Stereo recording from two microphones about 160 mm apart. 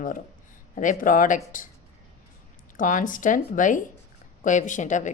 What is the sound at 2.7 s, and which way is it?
A woman's voice, 55° left (ahead or behind).